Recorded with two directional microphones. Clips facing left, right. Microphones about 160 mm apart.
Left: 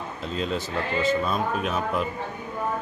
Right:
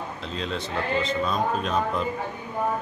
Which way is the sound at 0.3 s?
5° left (ahead or behind).